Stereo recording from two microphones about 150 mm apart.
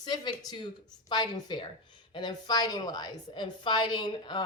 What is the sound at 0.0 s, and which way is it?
Speech, 30° left (ahead or behind).